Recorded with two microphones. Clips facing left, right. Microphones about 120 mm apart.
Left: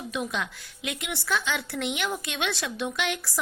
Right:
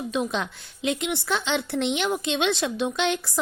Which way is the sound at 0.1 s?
25° right (ahead or behind).